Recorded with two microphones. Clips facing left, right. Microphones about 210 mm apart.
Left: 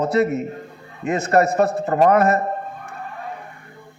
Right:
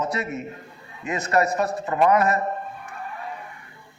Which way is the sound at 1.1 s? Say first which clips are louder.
Left 5 dB; 55° left (ahead or behind).